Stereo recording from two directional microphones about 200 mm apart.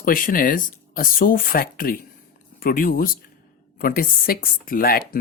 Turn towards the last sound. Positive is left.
turn(degrees=45)  # may be behind; listen again after turning